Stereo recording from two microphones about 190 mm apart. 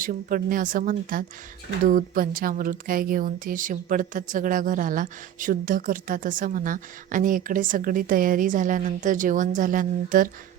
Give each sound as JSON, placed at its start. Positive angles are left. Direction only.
{"t": 0.0, "sound": "speech", "side_deg": -45}